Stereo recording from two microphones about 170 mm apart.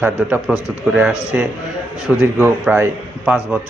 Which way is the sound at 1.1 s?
15° left (ahead or behind).